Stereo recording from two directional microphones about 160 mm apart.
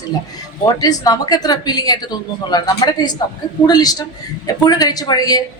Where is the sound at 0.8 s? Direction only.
25° left (ahead or behind).